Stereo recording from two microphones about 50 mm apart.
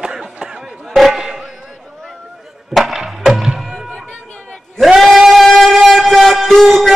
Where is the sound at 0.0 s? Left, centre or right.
Centre.